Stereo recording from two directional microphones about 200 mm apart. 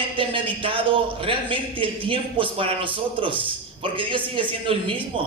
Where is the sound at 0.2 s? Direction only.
25° right (ahead or behind).